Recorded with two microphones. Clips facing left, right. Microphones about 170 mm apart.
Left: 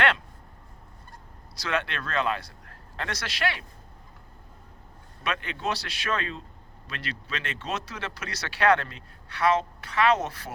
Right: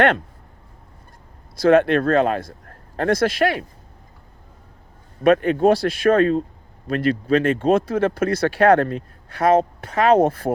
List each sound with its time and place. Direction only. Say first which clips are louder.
1.5 s speech: right 16 dB; 50° right (ahead or behind)
5.2 s speech: right 16 dB; 50° right (ahead or behind)